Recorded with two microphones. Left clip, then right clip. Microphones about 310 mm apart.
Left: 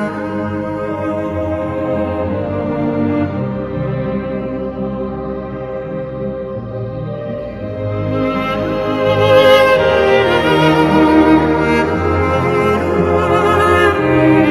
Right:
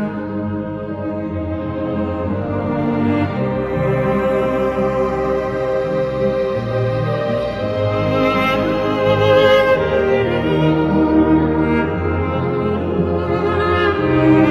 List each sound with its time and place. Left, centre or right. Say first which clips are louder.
3.0 s music: left 1 dB; centre
8.2 s music: right 1 dB; centre
9.0 s music: left 3 dB; centre; by 11.9 s left
12.4 s music: left 6 dB; left
12.9 s music: left 6 dB; left; by 14.5 s centre